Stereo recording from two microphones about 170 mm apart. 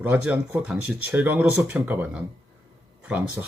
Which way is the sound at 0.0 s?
10° right (ahead or behind).